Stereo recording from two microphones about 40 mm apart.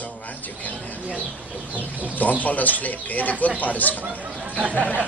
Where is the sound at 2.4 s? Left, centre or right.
Left.